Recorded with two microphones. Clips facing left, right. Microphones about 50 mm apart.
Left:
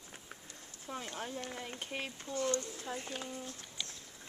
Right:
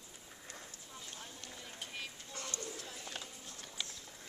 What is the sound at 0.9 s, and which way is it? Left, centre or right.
Run, left.